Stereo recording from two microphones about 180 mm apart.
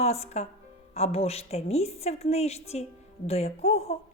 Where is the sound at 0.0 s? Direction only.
35° left (ahead or behind).